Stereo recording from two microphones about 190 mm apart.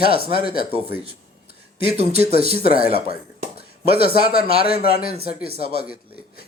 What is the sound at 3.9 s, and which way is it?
Speech, 30° right (ahead or behind).